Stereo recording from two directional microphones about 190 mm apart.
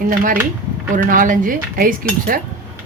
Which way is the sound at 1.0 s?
45° right (ahead or behind).